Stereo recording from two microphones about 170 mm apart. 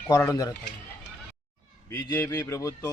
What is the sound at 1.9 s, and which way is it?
Speech, 20° left (ahead or behind).